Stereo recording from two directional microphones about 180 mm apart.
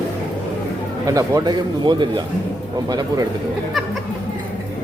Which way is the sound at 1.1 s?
20° right (ahead or behind).